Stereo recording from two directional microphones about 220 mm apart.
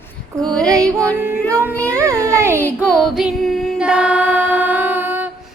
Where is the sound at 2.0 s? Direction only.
15° right (ahead or behind).